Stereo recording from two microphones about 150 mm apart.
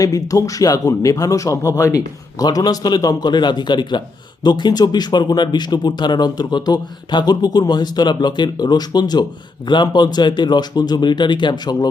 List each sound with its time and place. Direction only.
0.0 s speech: 25° left (ahead or behind)